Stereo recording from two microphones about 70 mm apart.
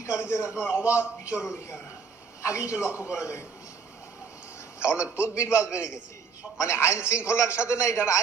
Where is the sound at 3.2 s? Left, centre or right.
Left.